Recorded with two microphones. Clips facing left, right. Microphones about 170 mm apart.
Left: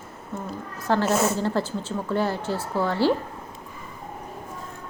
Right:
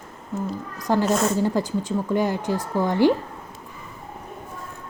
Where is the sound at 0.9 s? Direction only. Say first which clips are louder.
Right 1 dB; 15° right (ahead or behind).